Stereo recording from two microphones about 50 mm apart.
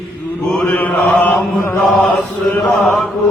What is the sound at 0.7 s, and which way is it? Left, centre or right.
Chant, left.